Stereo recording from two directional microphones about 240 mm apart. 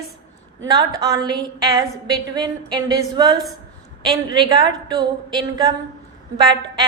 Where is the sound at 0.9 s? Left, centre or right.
Centre.